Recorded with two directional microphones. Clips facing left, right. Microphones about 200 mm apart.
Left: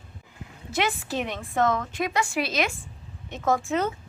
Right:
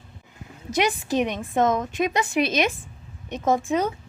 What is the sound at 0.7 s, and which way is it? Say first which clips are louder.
A woman's voice: right 4 dB; 15° right (ahead or behind).